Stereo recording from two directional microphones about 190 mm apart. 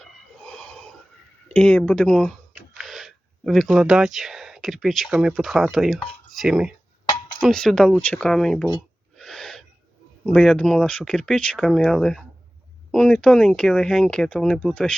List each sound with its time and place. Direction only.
0.0 s snort: 5° left (ahead or behind)
1.5 s speech: 5° left (ahead or behind)
7.0 s a sound: 20° left (ahead or behind)
7.4 s speech: centre (ahead or behind)
9.1 s owl: centre (ahead or behind)
10.2 s speech: 5° left (ahead or behind)